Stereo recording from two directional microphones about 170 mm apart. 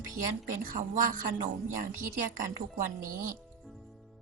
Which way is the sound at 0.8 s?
55° right (ahead or behind).